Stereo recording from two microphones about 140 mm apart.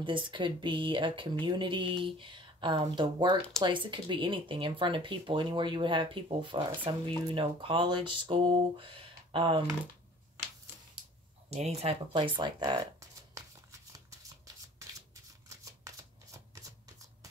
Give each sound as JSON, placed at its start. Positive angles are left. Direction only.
{"t": 0.0, "sound": "speech", "side_deg": -35}
{"t": 11.5, "sound": "speech", "side_deg": -50}
{"t": 12.1, "sound": "speech", "side_deg": -35}
{"t": 13.3, "sound": "shuffling cards", "side_deg": -25}